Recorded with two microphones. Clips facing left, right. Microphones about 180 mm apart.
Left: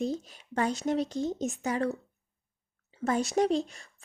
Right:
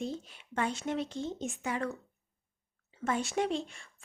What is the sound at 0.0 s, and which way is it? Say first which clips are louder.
Speech: left 6 dB; 40° left (ahead or behind).